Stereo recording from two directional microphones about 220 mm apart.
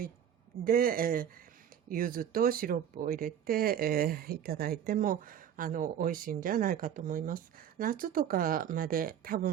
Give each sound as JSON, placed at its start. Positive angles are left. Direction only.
{"t": 0.6, "sound": "speech", "side_deg": -40}